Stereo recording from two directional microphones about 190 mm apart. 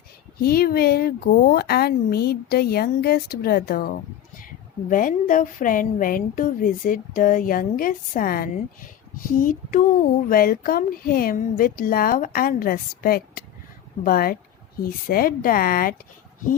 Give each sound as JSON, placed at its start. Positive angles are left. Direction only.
{"t": 0.4, "sound": "a woman's voice", "side_deg": 55}